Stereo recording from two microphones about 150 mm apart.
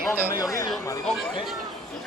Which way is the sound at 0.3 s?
25° left (ahead or behind).